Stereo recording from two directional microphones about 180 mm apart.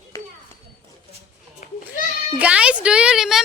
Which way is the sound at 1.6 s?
40° left (ahead or behind).